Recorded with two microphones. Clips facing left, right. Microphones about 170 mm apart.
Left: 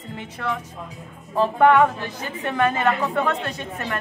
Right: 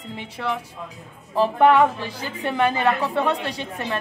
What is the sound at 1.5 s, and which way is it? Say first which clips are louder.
Speech: even; 10° right (ahead or behind).